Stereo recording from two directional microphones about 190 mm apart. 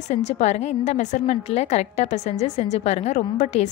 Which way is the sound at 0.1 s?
35° left (ahead or behind).